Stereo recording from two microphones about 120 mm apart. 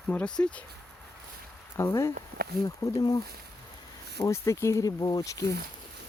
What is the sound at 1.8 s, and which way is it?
Speech, 20° left (ahead or behind).